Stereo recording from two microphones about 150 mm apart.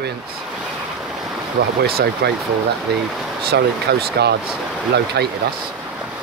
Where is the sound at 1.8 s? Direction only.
90° right.